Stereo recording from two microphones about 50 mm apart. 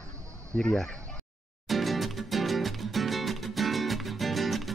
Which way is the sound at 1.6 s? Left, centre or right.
Centre.